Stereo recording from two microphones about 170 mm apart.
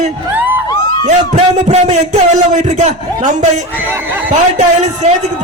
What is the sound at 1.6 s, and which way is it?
A man's voice, 45° right (ahead or behind).